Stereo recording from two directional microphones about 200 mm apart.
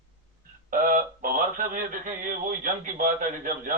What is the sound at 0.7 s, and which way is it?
Speech, 40° right (ahead or behind).